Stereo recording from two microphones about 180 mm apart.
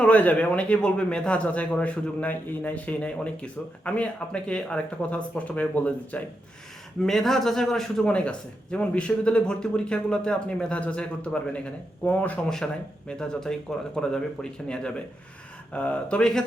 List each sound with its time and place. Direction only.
0.0 s a man's voice: 10° left (ahead or behind)